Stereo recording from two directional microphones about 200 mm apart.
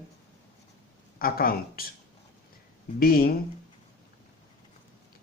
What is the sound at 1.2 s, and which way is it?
Speech, 45° left (ahead or behind).